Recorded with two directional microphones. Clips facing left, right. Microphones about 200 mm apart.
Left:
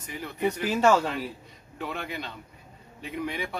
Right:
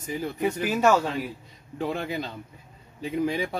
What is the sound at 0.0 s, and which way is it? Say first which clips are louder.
Speech: right 7 dB; 30° right (ahead or behind).